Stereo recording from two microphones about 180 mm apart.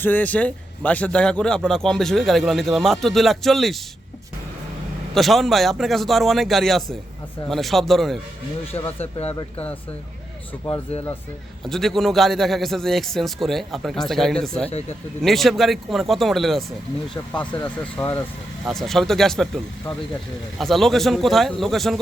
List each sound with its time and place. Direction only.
0.0 s speech: 10° left (ahead or behind)
5.1 s speech: centre (ahead or behind)
8.7 s speech: 30° left (ahead or behind)
11.6 s speech: centre (ahead or behind)